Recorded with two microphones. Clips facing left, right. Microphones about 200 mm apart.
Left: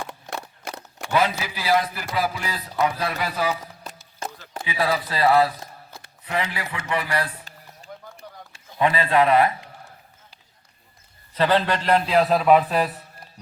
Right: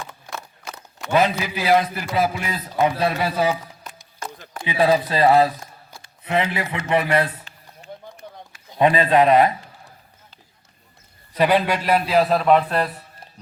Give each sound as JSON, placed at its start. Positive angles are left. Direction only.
{"t": 0.0, "sound": "a sound", "side_deg": 65}
{"t": 1.1, "sound": "a man's voice", "side_deg": -20}
{"t": 4.6, "sound": "a man's voice", "side_deg": -20}
{"t": 7.4, "sound": "run", "side_deg": 35}
{"t": 8.8, "sound": "a man's voice", "side_deg": -20}
{"t": 11.3, "sound": "a man's voice", "side_deg": -15}